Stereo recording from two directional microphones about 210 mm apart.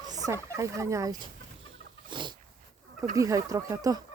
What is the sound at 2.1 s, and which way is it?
Dog, 20° right (ahead or behind).